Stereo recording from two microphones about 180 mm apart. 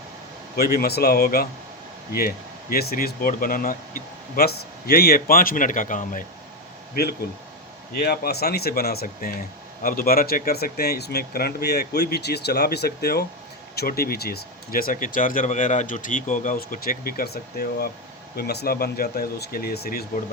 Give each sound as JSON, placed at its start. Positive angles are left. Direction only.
{"t": 0.5, "sound": "speech", "side_deg": 60}
{"t": 6.9, "sound": "speech", "side_deg": 60}